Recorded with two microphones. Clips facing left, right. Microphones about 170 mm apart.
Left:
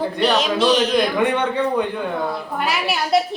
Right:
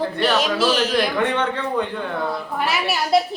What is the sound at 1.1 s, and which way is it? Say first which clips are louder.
Speech: left 2 dB; 10° left (ahead or behind).